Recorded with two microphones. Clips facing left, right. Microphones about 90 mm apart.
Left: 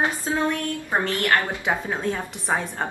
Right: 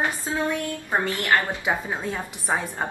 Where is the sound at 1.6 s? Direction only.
5° right (ahead or behind).